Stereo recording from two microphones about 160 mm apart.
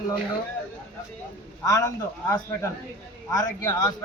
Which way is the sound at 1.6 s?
20° left (ahead or behind).